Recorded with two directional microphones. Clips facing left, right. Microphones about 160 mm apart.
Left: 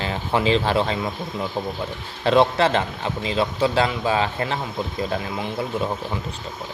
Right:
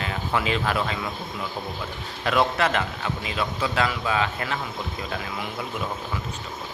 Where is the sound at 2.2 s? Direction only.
30° left (ahead or behind).